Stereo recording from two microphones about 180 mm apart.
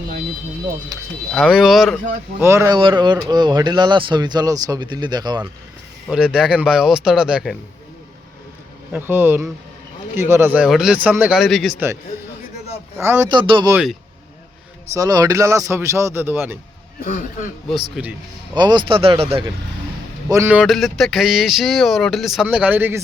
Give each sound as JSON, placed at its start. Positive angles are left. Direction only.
{"t": 0.9, "sound": "speech", "side_deg": -20}
{"t": 1.3, "sound": "speech", "side_deg": 0}
{"t": 2.4, "sound": "speech", "side_deg": -15}
{"t": 2.7, "sound": "speech", "side_deg": -25}
{"t": 6.1, "sound": "speech", "side_deg": -5}
{"t": 8.9, "sound": "speech", "side_deg": -10}
{"t": 13.0, "sound": "speech", "side_deg": -15}
{"t": 13.3, "sound": "speech", "side_deg": -25}
{"t": 14.9, "sound": "speech", "side_deg": -20}
{"t": 17.0, "sound": "a man's voice", "side_deg": 50}
{"t": 18.0, "sound": "speech", "side_deg": -5}
{"t": 18.5, "sound": "speech", "side_deg": -25}
{"t": 20.3, "sound": "speech", "side_deg": -15}
{"t": 20.6, "sound": "speech", "side_deg": 0}